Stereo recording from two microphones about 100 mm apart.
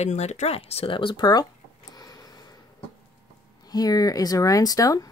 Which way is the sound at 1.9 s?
40° left (ahead or behind).